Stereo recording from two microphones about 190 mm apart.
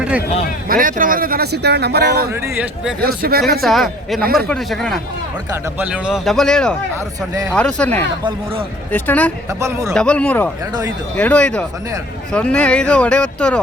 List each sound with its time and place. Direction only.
0.7 s speech: 45° right (ahead or behind)
2.3 s speech: 5° right (ahead or behind)
3.0 s speech: 50° right (ahead or behind)
3.6 s speech: centre (ahead or behind)
4.2 s speech: 55° right (ahead or behind)
4.4 s speech: centre (ahead or behind)
9.5 s speech: 15° right (ahead or behind)
9.9 s speech: 5° left (ahead or behind)